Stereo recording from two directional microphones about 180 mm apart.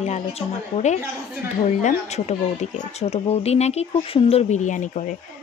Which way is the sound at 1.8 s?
40° left (ahead or behind).